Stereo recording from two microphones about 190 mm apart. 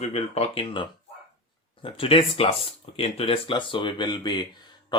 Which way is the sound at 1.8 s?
30° left (ahead or behind).